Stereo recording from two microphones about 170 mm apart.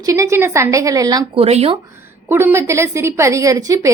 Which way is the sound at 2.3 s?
15° right (ahead or behind).